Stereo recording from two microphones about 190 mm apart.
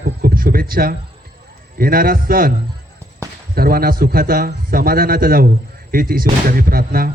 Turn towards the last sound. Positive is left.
turn(degrees=-50)  # may be behind; listen again after turning